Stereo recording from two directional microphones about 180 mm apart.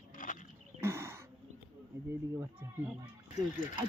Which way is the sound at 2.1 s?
15° right (ahead or behind).